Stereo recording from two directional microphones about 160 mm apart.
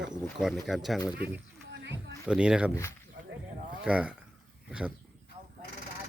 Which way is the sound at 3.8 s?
5° right (ahead or behind).